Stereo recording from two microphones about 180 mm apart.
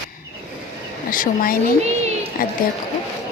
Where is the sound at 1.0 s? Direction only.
50° left (ahead or behind).